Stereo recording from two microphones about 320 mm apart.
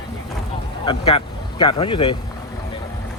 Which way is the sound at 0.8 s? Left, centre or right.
Centre.